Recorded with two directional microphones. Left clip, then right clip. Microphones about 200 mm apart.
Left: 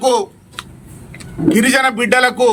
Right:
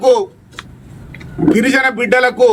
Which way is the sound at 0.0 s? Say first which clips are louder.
Right 3 dB; centre (ahead or behind).